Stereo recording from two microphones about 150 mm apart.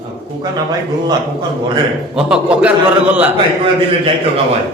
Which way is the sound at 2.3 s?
5° right (ahead or behind).